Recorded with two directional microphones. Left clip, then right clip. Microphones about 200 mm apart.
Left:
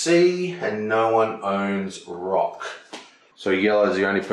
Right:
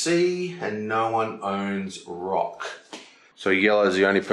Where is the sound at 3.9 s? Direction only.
10° left (ahead or behind).